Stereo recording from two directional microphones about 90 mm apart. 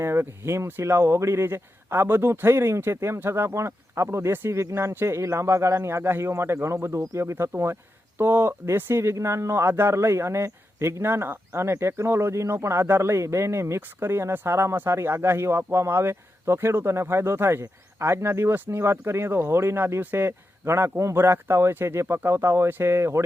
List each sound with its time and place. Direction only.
0.0 s speech: 30° right (ahead or behind)